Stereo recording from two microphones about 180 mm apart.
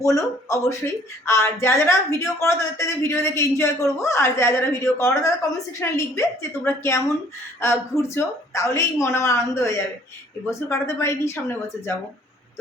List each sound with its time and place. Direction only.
0.0 s a woman's voice: 20° left (ahead or behind)